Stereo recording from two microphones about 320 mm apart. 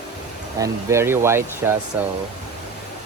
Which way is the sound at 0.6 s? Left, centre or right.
Centre.